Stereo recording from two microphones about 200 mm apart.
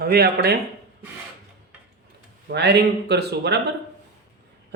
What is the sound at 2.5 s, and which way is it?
Speech, 55° right (ahead or behind).